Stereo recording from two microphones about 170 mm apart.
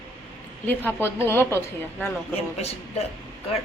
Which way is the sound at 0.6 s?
10° left (ahead or behind).